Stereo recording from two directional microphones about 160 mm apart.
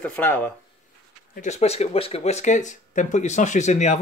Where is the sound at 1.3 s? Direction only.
45° left (ahead or behind).